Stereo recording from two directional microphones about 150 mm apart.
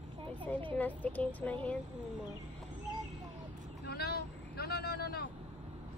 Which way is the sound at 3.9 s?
90° left.